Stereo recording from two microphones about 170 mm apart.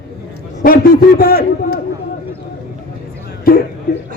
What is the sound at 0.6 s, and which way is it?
A man's voice, 60° left (ahead or behind).